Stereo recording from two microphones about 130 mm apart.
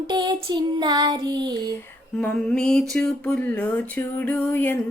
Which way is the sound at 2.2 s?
10° left (ahead or behind).